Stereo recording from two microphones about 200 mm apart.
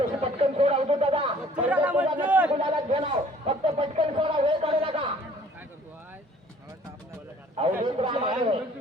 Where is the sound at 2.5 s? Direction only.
25° right (ahead or behind).